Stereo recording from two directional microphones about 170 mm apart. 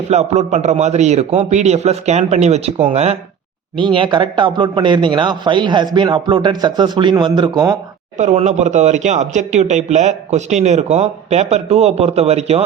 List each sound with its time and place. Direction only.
0.1 s a man's voice: 40° right (ahead or behind); by 7.8 s 25° right (ahead or behind)
8.2 s speech: 45° right (ahead or behind)